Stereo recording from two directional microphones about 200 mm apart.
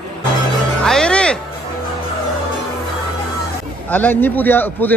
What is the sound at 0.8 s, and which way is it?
Speech, 5° left (ahead or behind).